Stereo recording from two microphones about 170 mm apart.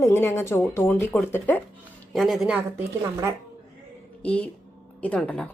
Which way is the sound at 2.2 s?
Centre (ahead or behind).